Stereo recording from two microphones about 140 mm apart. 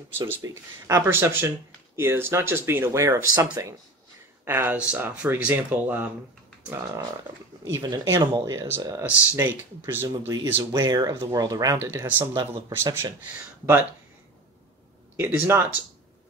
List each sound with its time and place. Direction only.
0.4 s speech: 20° right (ahead or behind)
7.6 s speech: 25° right (ahead or behind)
10.0 s speech: 25° right (ahead or behind)
11.8 s speech: 15° right (ahead or behind)
15.1 s speech: 15° right (ahead or behind)